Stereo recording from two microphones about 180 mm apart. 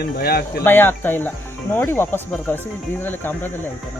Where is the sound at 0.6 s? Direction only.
10° left (ahead or behind).